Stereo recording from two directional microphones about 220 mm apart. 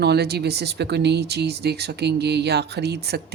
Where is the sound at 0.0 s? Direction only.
50° right (ahead or behind).